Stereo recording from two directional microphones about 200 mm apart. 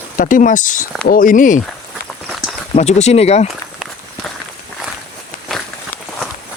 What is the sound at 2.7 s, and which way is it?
Speech, 35° left (ahead or behind).